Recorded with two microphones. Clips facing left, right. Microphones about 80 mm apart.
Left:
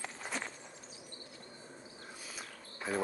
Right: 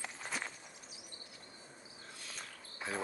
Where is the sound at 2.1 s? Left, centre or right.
Centre.